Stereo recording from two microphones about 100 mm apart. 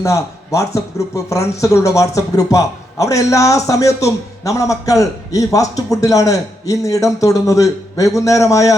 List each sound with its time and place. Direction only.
0.0 s a man's voice: 30° left (ahead or behind)